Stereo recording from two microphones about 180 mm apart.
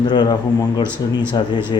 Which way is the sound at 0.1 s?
25° left (ahead or behind).